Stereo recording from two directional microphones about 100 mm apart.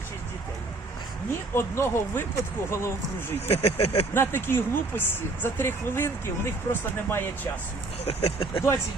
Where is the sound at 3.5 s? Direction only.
85° left.